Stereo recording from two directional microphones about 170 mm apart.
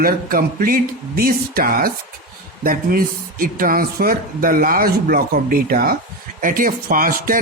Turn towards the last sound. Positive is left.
turn(degrees=-55)  # may be behind; listen again after turning